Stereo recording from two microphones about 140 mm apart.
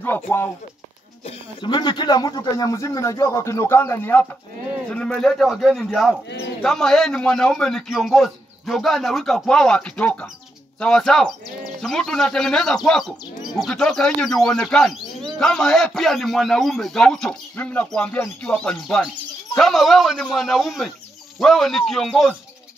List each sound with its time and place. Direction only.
0.0 s speech: 15° left (ahead or behind)
1.6 s a man's voice: 30° left (ahead or behind); by 22.3 s centre (ahead or behind)